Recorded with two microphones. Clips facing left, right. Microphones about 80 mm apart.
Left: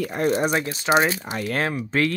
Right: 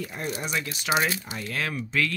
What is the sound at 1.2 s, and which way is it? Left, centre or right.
Speech, left.